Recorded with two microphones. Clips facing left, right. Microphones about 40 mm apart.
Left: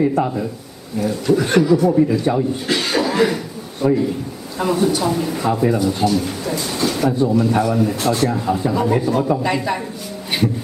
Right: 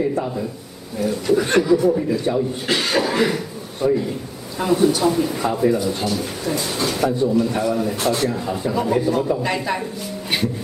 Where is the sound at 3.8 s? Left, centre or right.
Left.